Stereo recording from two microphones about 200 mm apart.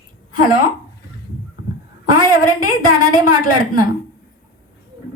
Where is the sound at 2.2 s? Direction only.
45° left (ahead or behind).